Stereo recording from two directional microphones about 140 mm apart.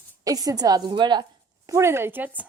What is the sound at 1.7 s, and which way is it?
Speech, 20° right (ahead or behind).